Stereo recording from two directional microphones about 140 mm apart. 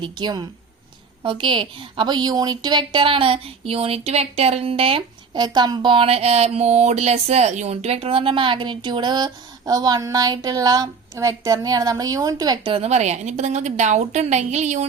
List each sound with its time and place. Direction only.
0.0 s a woman's voice: 30° right (ahead or behind); by 14.8 s 55° right (ahead or behind)